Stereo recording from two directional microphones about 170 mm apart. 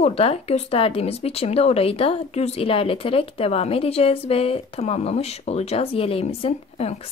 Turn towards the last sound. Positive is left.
turn(degrees=35)  # may be behind; listen again after turning